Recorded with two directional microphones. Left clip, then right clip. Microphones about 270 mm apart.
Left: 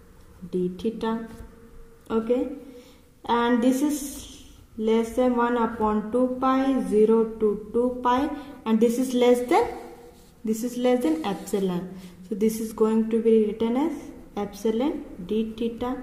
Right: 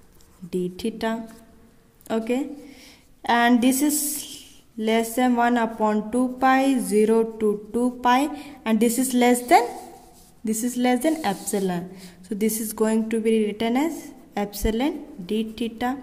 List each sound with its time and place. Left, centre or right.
0.5 s a woman's voice: right